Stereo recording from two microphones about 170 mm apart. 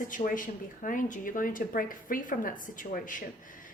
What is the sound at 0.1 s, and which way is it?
A woman's voice, 50° left (ahead or behind).